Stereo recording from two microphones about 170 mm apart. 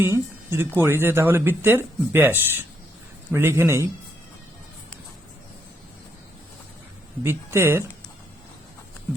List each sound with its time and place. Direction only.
0.0 s speech: 15° right (ahead or behind)
7.2 s speech: 15° right (ahead or behind)